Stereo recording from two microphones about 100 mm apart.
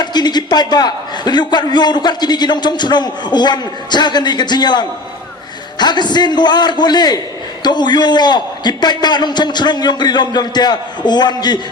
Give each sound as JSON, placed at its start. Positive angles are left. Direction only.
{"t": 0.0, "sound": "a man's voice", "side_deg": 45}